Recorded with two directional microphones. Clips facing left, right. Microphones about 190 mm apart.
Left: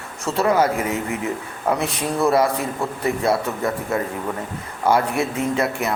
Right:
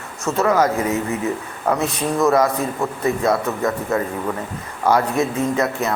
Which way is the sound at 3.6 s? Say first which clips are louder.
Right 2 dB; 30° left (ahead or behind).